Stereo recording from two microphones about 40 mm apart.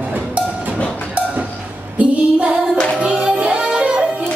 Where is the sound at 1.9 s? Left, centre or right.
Right.